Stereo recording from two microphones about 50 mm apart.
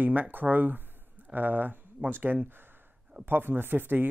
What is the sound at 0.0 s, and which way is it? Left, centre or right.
Speech, right.